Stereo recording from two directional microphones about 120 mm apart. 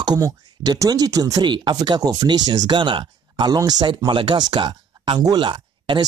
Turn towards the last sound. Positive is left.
turn(degrees=-45)  # may be behind; listen again after turning